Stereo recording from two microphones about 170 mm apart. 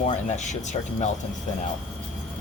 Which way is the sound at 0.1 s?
45° left (ahead or behind).